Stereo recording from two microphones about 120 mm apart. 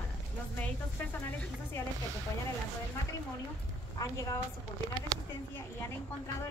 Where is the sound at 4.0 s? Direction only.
30° left (ahead or behind).